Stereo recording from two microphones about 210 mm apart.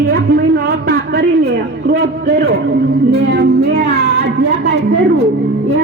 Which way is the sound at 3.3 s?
50° right (ahead or behind).